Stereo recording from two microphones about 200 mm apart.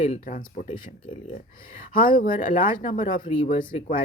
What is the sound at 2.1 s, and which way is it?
Speech, 45° left (ahead or behind).